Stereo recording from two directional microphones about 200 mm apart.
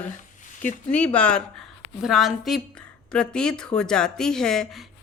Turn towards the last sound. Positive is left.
turn(degrees=0)  # may be behind; listen again after turning